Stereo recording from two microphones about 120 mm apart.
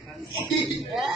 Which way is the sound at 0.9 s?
Centre (ahead or behind).